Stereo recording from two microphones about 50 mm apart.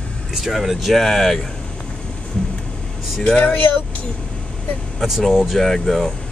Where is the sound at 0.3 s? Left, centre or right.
Centre.